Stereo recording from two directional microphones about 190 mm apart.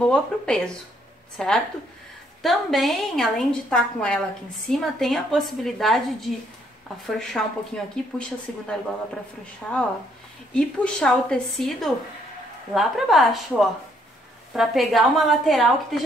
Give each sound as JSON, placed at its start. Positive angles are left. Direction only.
{"t": 0.0, "sound": "a woman's voice", "side_deg": 5}